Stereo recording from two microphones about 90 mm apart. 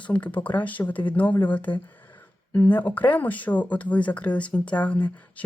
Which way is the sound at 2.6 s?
20° left (ahead or behind).